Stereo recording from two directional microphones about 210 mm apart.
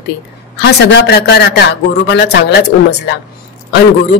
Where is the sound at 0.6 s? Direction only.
55° left (ahead or behind).